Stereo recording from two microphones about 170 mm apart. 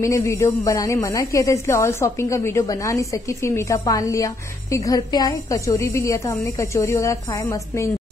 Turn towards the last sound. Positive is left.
turn(degrees=15)  # may be behind; listen again after turning